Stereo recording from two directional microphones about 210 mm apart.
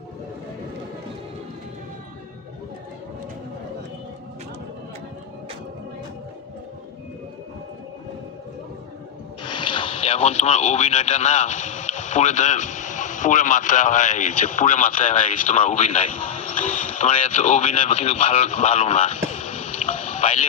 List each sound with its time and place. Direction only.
9.4 s speech: 25° left (ahead or behind)